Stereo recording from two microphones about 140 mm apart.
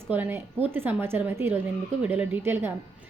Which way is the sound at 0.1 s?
15° right (ahead or behind).